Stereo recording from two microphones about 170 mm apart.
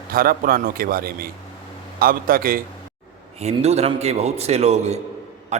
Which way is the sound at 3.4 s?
40° right (ahead or behind).